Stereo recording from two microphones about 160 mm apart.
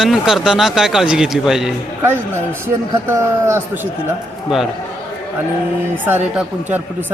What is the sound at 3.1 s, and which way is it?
Speech, 15° right (ahead or behind).